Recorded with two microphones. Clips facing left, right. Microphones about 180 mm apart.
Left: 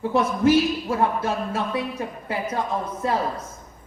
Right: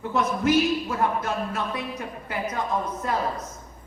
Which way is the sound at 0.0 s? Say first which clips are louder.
Left 4 dB; 30° left (ahead or behind).